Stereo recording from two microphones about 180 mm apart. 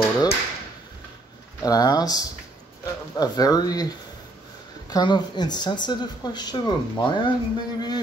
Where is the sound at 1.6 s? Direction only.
20° left (ahead or behind).